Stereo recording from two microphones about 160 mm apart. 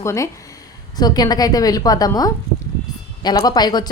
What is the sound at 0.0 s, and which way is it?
Speech, 20° left (ahead or behind).